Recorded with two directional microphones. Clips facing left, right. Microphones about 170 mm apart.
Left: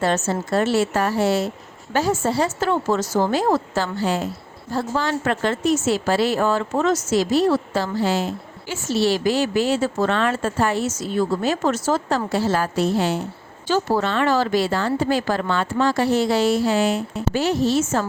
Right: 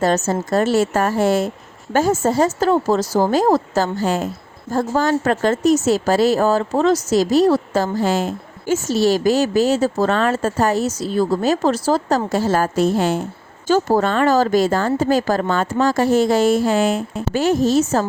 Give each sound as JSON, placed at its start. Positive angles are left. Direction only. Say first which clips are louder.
{"t": 0.0, "sound": "a woman's voice", "louder": "right 3 dB", "side_deg": -40}